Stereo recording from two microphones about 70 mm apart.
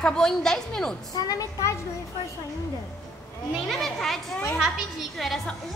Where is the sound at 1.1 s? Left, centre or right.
Left.